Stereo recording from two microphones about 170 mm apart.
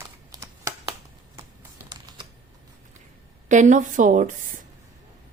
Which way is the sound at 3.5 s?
45° right (ahead or behind).